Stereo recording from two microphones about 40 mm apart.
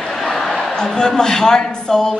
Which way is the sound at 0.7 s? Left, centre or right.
Centre.